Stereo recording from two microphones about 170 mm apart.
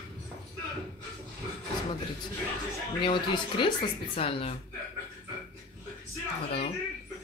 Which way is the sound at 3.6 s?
30° left (ahead or behind).